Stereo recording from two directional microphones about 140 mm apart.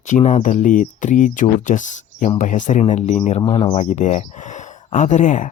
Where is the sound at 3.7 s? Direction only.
55° left (ahead or behind).